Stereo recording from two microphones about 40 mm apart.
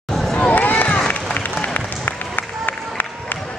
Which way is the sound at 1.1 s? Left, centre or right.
Left.